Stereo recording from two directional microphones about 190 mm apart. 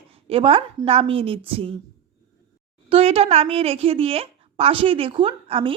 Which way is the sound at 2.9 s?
30° right (ahead or behind).